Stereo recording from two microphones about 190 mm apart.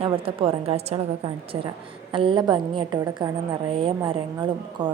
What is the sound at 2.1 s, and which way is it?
A woman's voice, 25° right (ahead or behind).